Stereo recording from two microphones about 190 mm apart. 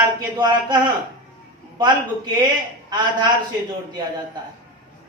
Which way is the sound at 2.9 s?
25° right (ahead or behind).